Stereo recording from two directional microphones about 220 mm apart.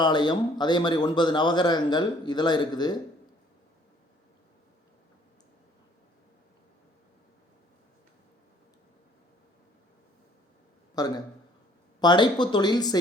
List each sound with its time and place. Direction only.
0.0 s a man's voice: 20° left (ahead or behind)
11.0 s a man's voice: 15° left (ahead or behind)